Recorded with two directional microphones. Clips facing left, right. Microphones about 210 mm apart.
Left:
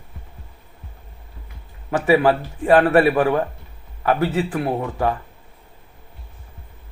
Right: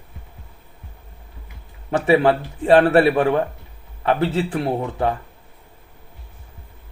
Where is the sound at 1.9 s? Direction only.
30° right (ahead or behind).